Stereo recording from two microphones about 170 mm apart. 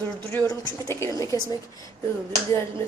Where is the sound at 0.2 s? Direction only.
15° left (ahead or behind).